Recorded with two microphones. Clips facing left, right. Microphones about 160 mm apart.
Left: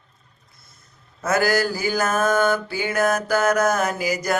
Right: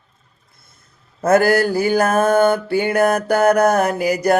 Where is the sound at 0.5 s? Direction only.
55° right (ahead or behind).